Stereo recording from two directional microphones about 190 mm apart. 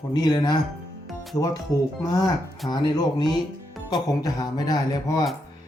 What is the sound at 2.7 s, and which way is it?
Speech, 20° left (ahead or behind).